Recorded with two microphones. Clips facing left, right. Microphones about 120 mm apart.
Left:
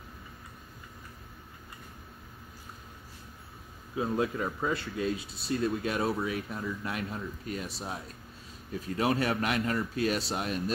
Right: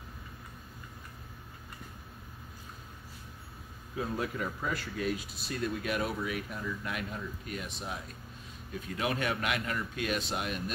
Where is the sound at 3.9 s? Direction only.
25° left (ahead or behind).